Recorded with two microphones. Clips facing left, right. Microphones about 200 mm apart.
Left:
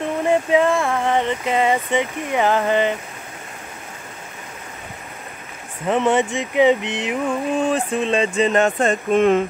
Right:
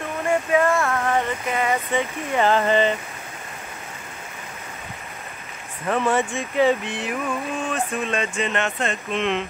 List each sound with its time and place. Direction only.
0.3 s speech: 20° left (ahead or behind)
5.9 s speech: 20° left (ahead or behind)
7.2 s speech: 30° left (ahead or behind)